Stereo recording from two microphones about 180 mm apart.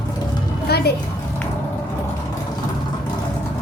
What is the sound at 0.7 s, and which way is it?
Speech, 60° left (ahead or behind).